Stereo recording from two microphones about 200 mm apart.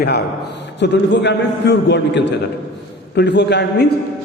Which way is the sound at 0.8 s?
60° left (ahead or behind).